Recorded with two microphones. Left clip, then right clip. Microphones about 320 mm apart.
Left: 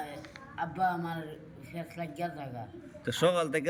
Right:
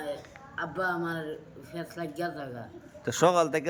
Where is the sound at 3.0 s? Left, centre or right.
Centre.